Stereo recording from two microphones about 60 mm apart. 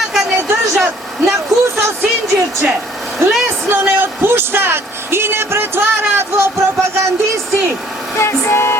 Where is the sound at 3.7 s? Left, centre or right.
Right.